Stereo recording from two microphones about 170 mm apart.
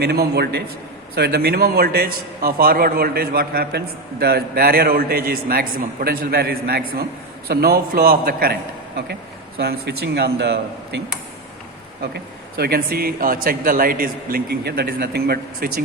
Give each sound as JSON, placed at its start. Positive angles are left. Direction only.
{"t": 0.0, "sound": "a man's voice", "side_deg": -70}
{"t": 9.6, "sound": "speech", "side_deg": -70}
{"t": 12.1, "sound": "a man's voice", "side_deg": -70}